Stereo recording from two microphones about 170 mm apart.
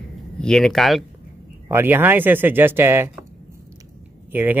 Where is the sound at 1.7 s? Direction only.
15° right (ahead or behind).